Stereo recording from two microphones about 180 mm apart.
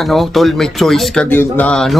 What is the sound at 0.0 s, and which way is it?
Speech, centre (ahead or behind).